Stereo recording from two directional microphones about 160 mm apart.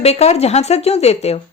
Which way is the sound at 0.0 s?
40° left (ahead or behind).